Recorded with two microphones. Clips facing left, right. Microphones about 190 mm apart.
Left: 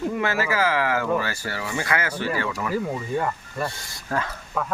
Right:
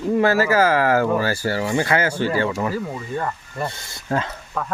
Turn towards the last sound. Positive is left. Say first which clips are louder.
# even
turn(degrees=5)  # may be behind; listen again after turning